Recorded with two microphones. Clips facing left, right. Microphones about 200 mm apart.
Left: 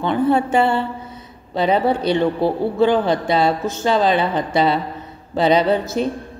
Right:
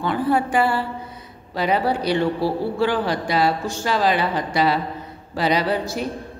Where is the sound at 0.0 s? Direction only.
25° left (ahead or behind).